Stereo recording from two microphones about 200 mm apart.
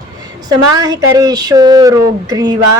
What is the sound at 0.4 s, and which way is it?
Speech, 20° right (ahead or behind).